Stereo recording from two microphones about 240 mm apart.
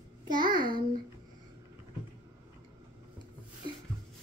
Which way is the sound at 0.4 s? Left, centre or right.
Centre.